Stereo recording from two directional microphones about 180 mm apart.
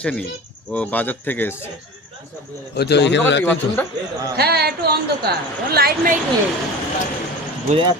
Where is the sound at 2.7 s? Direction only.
65° left (ahead or behind).